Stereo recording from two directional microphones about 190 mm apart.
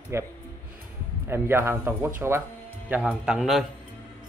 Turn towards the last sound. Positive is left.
turn(degrees=0)  # may be behind; listen again after turning